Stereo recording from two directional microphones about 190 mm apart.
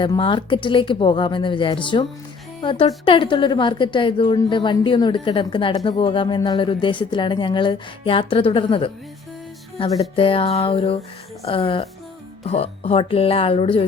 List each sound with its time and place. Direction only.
0.0 s a woman's voice: 25° left (ahead or behind)